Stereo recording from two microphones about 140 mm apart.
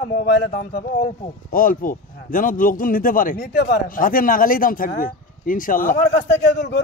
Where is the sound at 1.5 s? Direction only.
75° left (ahead or behind).